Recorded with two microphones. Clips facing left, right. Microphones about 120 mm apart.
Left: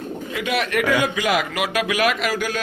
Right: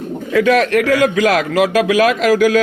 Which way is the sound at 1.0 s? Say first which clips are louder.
Right 7 dB; 90° right.